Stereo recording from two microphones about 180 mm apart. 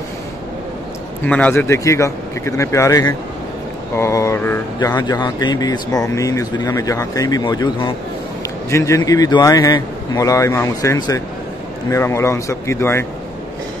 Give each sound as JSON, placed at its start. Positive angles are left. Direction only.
{"t": 1.2, "sound": "speech", "side_deg": 5}